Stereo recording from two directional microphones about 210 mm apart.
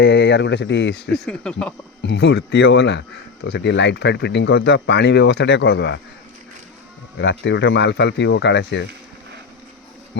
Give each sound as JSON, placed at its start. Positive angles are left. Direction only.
{"t": 0.0, "sound": "speech", "side_deg": 55}
{"t": 1.1, "sound": "speech", "side_deg": 5}
{"t": 2.0, "sound": "speech", "side_deg": 55}
{"t": 7.2, "sound": "speech", "side_deg": 55}